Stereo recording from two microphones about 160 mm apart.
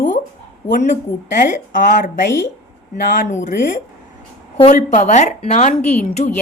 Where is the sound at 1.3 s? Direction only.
55° left (ahead or behind).